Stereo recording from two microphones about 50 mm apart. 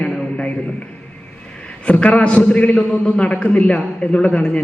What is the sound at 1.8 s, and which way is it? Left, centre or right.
A man's voice, left.